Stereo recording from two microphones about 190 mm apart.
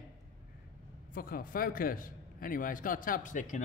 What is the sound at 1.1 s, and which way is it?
A man's voice, 50° left (ahead or behind).